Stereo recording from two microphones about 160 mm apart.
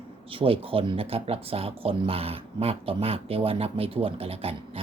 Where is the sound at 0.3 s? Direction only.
35° right (ahead or behind).